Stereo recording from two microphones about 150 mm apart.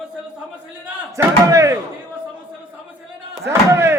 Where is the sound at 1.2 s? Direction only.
20° right (ahead or behind).